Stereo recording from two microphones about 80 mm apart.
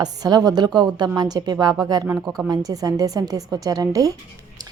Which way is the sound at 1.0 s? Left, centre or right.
Right.